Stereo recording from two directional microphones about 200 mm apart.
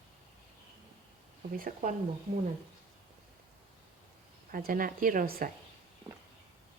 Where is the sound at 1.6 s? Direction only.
40° right (ahead or behind).